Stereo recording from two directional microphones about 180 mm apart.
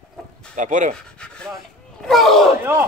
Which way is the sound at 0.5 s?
45° right (ahead or behind).